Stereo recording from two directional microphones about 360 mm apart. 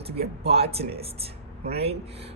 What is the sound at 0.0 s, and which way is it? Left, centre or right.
Speech, centre.